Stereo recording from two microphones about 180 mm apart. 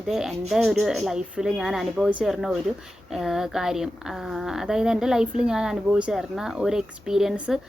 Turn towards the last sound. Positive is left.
turn(degrees=0)  # may be behind; listen again after turning